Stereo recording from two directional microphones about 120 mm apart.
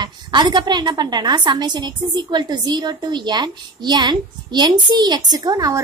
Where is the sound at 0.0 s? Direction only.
35° right (ahead or behind).